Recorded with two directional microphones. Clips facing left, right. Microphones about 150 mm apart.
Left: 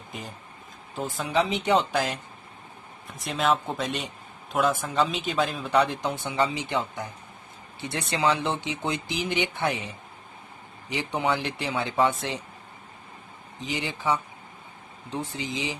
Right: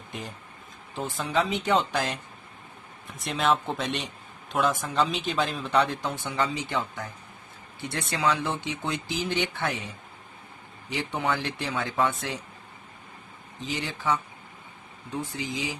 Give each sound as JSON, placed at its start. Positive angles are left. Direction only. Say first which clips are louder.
{"t": 0.1, "sound": "a man's voice", "louder": "right 1 dB", "side_deg": 0}
{"t": 1.3, "sound": "speech", "louder": "left 2 dB", "side_deg": 15}
{"t": 1.9, "sound": "a man's voice", "louder": "left 2 dB", "side_deg": 0}
{"t": 3.2, "sound": "a man's voice", "louder": "even", "side_deg": 0}
{"t": 6.0, "sound": "speech", "louder": "left 2 dB", "side_deg": 20}
{"t": 13.6, "sound": "speech", "louder": "left 1 dB", "side_deg": 20}